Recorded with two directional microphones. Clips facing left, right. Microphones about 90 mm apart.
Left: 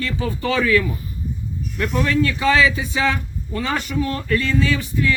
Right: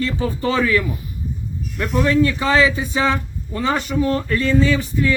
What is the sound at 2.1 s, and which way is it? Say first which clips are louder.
Speech: right 2 dB; 25° right (ahead or behind).